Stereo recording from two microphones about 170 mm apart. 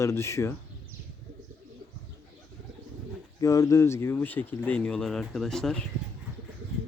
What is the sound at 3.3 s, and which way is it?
Speech, 20° left (ahead or behind).